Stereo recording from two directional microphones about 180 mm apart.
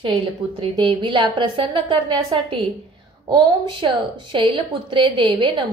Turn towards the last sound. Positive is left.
turn(degrees=-30)  # may be behind; listen again after turning